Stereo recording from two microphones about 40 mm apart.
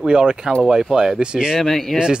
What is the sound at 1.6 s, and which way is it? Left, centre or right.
Speech, centre.